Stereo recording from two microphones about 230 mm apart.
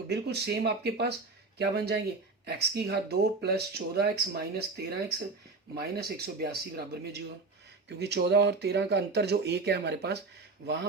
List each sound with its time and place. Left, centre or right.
0.1 s speech: right